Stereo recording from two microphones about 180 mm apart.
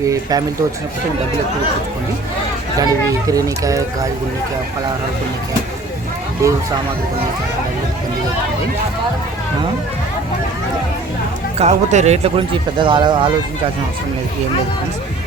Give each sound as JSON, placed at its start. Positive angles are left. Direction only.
{"t": 0.0, "sound": "speech", "side_deg": -20}
{"t": 2.7, "sound": "speech", "side_deg": -20}
{"t": 6.4, "sound": "speech", "side_deg": -15}
{"t": 11.5, "sound": "speech", "side_deg": -40}
{"t": 12.8, "sound": "speech", "side_deg": -25}